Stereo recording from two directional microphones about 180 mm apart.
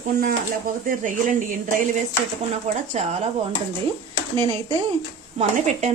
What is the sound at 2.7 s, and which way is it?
Speech, 40° right (ahead or behind).